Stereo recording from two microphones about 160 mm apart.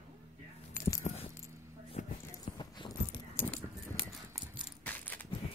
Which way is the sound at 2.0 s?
45° left (ahead or behind).